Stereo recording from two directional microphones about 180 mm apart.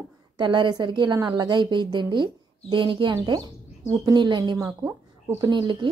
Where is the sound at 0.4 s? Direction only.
25° right (ahead or behind).